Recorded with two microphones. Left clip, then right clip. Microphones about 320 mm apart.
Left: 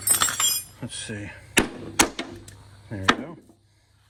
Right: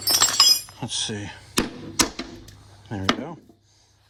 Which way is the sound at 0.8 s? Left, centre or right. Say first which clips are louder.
Right 7 dB; centre.